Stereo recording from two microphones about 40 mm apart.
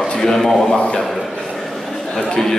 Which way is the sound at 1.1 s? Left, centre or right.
Centre.